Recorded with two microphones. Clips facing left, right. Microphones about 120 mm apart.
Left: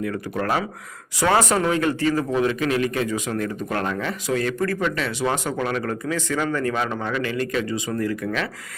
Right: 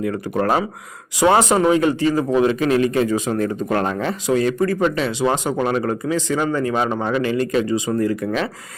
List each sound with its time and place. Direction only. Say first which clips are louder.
0.0 s speech: right 5 dB; 25° right (ahead or behind)